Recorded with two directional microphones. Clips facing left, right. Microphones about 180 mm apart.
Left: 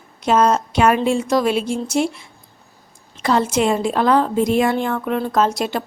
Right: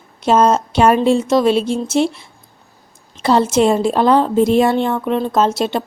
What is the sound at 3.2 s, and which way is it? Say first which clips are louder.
A woman's voice: right 4 dB; 30° right (ahead or behind).